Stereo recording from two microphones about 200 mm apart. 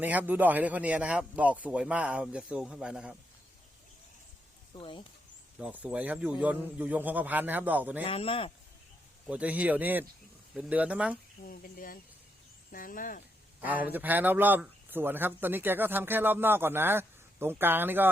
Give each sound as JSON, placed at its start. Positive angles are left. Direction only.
{"t": 0.0, "sound": "speech", "side_deg": -10}
{"t": 4.7, "sound": "speech", "side_deg": 25}
{"t": 5.5, "sound": "speech", "side_deg": -5}
{"t": 8.0, "sound": "speech", "side_deg": 30}
{"t": 9.2, "sound": "speech", "side_deg": -5}
{"t": 11.4, "sound": "speech", "side_deg": 45}
{"t": 13.6, "sound": "speech", "side_deg": -10}